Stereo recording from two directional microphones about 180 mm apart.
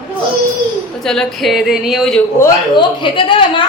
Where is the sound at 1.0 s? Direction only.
5° left (ahead or behind).